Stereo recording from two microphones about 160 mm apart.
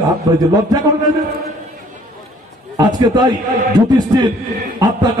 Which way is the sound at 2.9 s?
25° right (ahead or behind).